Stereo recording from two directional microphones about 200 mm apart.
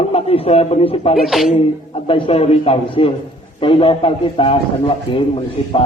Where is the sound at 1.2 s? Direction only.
Centre (ahead or behind).